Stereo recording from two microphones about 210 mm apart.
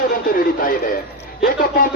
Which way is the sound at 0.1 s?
45° left (ahead or behind).